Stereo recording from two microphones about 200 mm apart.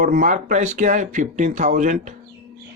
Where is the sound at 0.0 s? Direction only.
40° right (ahead or behind).